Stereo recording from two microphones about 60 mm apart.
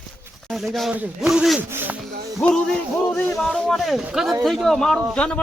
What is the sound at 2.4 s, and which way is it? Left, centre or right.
Speech, left.